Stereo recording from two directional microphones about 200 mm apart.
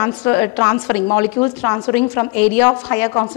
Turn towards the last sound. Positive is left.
turn(degrees=15)  # may be behind; listen again after turning